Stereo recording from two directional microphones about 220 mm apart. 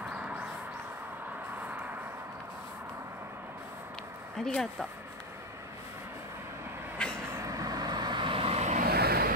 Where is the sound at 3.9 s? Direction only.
5° left (ahead or behind).